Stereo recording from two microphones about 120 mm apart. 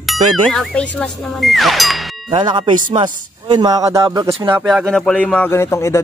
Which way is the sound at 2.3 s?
40° right (ahead or behind).